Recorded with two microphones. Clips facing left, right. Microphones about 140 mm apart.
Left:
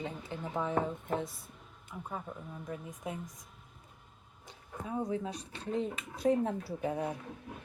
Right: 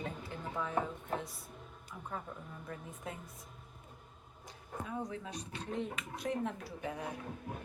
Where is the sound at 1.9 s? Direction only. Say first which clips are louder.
Left 3 dB; 20° left (ahead or behind).